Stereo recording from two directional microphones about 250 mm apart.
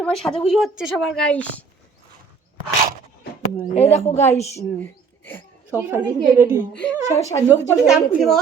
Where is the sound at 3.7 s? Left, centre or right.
Left.